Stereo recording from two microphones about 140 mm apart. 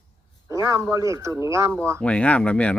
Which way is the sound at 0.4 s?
20° right (ahead or behind).